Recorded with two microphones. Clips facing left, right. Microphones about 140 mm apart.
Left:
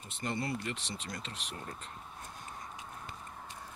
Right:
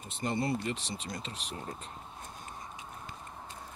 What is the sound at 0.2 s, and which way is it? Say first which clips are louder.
Speech: right 4 dB; 25° right (ahead or behind).